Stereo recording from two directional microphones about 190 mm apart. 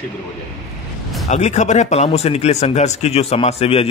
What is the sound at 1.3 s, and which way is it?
Speech, 40° left (ahead or behind).